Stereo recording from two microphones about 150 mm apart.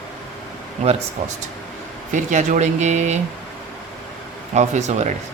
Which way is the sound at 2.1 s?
55° right (ahead or behind).